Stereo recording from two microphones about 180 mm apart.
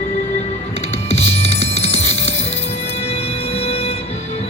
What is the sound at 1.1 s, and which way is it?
Music, 35° left (ahead or behind).